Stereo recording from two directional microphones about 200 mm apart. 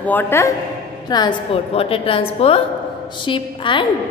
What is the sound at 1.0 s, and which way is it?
A woman's voice, 20° left (ahead or behind).